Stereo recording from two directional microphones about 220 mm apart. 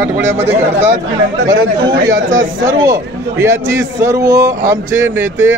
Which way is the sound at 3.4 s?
10° right (ahead or behind).